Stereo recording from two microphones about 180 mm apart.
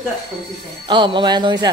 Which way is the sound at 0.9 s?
25° right (ahead or behind).